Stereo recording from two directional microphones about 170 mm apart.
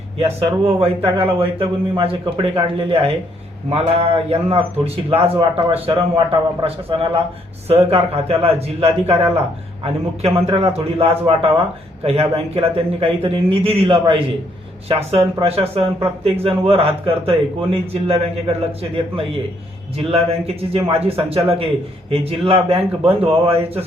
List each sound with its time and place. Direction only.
0.6 s speech: 35° right (ahead or behind)
9.2 s a man's voice: 15° right (ahead or behind)
9.8 s speech: 35° right (ahead or behind)
20.6 s speech: 35° right (ahead or behind)